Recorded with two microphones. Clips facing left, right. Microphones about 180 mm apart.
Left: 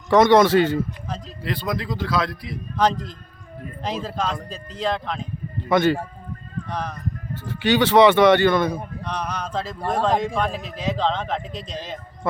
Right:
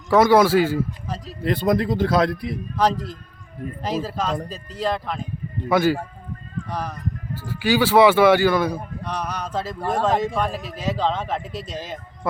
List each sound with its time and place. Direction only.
0.1 s a man's voice: 5° right (ahead or behind)
1.4 s speech: 50° right (ahead or behind)
2.7 s a man's voice: 5° right (ahead or behind)